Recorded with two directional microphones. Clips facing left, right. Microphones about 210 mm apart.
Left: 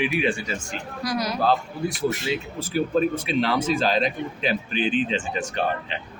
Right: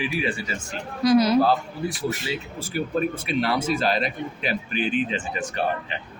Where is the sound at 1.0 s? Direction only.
25° right (ahead or behind).